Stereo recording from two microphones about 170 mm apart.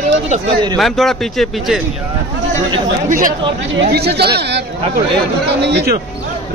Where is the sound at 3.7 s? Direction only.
70° right (ahead or behind).